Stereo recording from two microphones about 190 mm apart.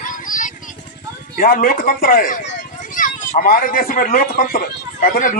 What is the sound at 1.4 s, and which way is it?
A man's voice, 50° left (ahead or behind).